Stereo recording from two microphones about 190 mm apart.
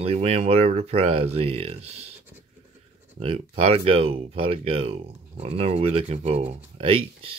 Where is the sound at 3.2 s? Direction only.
30° right (ahead or behind).